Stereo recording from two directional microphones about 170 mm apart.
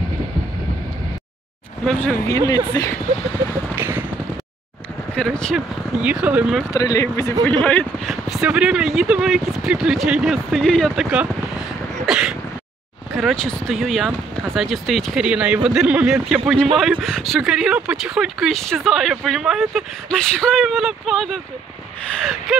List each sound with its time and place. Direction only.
1.9 s speech: 5° left (ahead or behind)
2.1 s speech: 20° left (ahead or behind)
3.7 s a sound: 15° right (ahead or behind)
5.1 s speech: 5° left (ahead or behind)
5.9 s speech: 5° right (ahead or behind)
6.7 s speech: 20° left (ahead or behind)
7.6 s speech: 5° left (ahead or behind)